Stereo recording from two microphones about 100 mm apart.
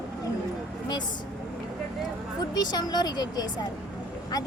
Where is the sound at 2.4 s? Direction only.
40° left (ahead or behind).